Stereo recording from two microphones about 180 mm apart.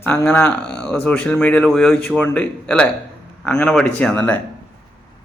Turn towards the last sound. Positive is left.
turn(degrees=10)  # may be behind; listen again after turning